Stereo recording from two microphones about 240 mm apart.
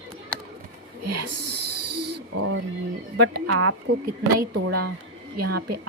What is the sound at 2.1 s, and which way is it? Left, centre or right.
Owl, right.